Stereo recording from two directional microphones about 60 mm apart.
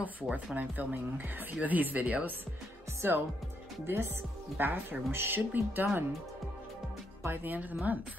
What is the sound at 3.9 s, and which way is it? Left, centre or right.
Speech, right.